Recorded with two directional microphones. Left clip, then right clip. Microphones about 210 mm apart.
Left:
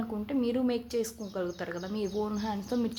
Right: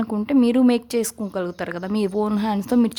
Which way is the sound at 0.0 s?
50° right (ahead or behind).